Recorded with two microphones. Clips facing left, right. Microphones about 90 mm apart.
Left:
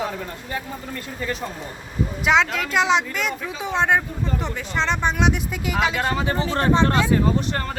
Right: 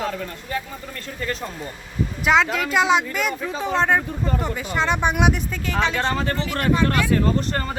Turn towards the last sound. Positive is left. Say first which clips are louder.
# even
turn(degrees=0)  # may be behind; listen again after turning